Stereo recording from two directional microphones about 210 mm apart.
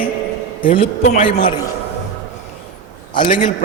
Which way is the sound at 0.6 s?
25° left (ahead or behind).